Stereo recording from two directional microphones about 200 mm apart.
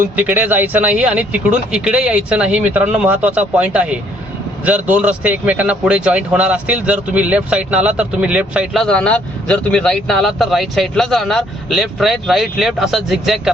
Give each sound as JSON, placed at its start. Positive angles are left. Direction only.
{"t": 0.0, "sound": "a man's voice", "side_deg": -10}